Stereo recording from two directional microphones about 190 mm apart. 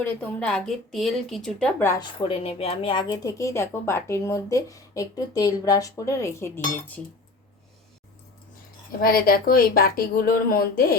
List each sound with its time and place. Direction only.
0.0 s a woman's voice: 5° left (ahead or behind)
2.1 s speech: 30° left (ahead or behind); by 7.0 s 10° left (ahead or behind)
9.0 s speech: 50° left (ahead or behind)